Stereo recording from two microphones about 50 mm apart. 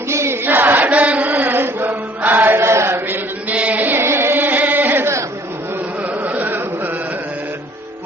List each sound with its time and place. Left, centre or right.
0.1 s chant: right
0.4 s chant: right
2.6 s chant: right
3.5 s chant: right
3.9 s carnatic music: right
6.2 s a sound: right